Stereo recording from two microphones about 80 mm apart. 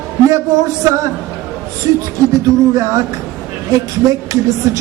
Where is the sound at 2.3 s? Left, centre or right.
Right.